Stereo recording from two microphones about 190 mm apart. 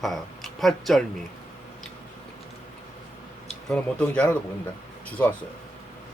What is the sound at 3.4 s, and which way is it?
Speech, 5° left (ahead or behind).